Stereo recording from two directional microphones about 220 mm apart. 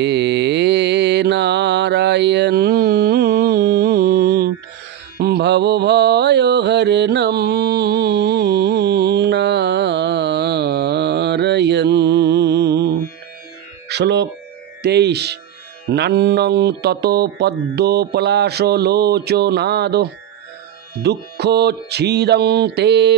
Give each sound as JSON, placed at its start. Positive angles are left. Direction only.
{"t": 0.0, "sound": "mantra", "side_deg": -50}
{"t": 13.8, "sound": "speech", "side_deg": -50}